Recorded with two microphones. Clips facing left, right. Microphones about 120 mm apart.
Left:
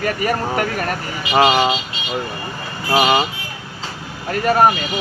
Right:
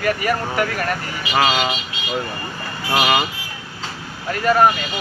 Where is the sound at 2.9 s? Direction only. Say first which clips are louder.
Left 3 dB; 25° left (ahead or behind).